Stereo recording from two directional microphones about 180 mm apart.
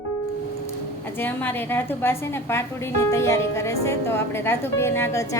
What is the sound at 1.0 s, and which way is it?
A woman's voice, 10° left (ahead or behind).